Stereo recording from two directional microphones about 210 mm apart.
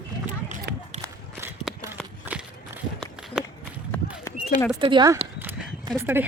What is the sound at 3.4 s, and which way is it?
Run, centre (ahead or behind).